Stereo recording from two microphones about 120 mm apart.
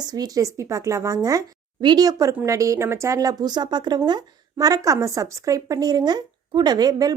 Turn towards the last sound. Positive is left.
turn(degrees=-35)  # may be behind; listen again after turning